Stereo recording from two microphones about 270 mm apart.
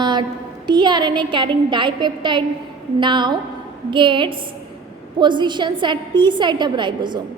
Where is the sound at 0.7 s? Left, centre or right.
Centre.